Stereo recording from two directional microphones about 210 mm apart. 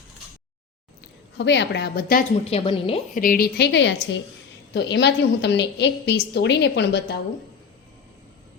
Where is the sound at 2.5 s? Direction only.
25° left (ahead or behind).